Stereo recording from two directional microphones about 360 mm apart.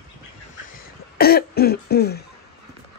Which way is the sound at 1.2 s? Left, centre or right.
Left.